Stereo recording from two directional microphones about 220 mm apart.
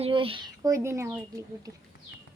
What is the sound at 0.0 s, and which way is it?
Speech, 25° right (ahead or behind).